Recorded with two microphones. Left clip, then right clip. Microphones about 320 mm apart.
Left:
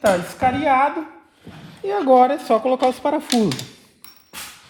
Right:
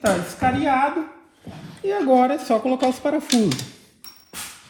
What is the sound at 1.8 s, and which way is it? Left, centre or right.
Speech, left.